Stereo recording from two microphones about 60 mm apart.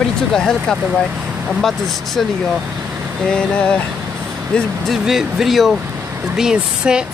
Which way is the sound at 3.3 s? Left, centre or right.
Centre.